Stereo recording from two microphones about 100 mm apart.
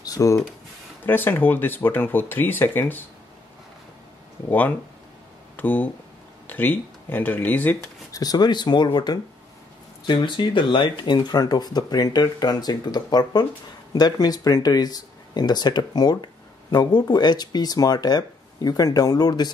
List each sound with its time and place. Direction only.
0.0 s a sound: 35° left (ahead or behind)
1.0 s speech: 20° left (ahead or behind)
4.5 s speech: 15° left (ahead or behind)
8.1 s speech: 40° left (ahead or behind)